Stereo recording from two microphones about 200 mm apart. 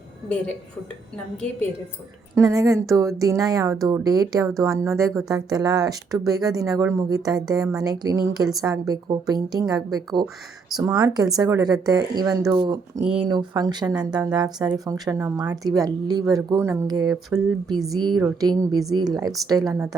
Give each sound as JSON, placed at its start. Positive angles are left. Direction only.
{"t": 2.3, "sound": "speech", "side_deg": -15}
{"t": 17.3, "sound": "speech", "side_deg": -5}
{"t": 17.7, "sound": "speech", "side_deg": -20}